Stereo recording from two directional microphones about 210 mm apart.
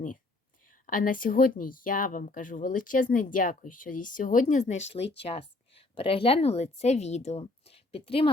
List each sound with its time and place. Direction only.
0.9 s a woman's voice: 40° left (ahead or behind)